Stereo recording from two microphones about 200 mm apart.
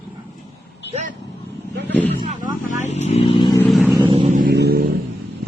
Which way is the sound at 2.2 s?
35° right (ahead or behind).